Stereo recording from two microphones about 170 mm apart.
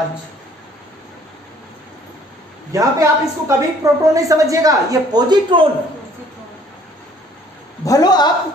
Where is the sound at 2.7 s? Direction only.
20° right (ahead or behind).